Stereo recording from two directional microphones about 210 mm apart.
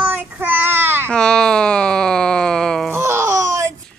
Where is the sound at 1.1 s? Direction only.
5° left (ahead or behind).